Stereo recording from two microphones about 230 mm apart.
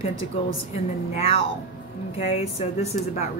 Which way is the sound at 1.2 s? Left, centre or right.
Left.